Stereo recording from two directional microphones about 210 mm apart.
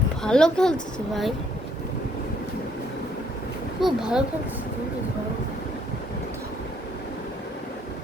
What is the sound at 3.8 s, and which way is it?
Speech, 5° right (ahead or behind).